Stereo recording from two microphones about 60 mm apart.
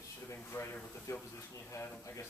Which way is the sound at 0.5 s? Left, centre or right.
Left.